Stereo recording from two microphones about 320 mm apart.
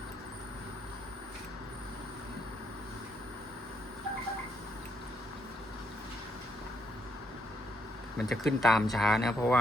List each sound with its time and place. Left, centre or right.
8.2 s speech: centre